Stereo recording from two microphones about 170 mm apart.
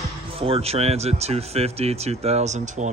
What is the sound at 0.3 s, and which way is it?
Speech, 35° right (ahead or behind).